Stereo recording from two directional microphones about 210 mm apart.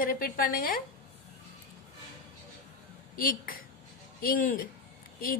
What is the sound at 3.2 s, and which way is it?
A woman's voice, 45° left (ahead or behind).